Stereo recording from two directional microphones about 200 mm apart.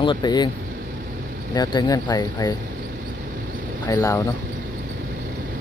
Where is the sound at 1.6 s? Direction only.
20° left (ahead or behind).